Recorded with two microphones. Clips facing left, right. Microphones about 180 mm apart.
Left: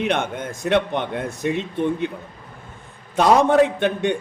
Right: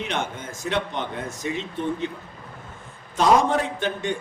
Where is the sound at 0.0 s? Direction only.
60° left (ahead or behind).